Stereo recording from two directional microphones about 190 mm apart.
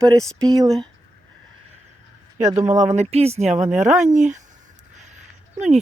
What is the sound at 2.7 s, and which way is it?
Speech, 40° right (ahead or behind).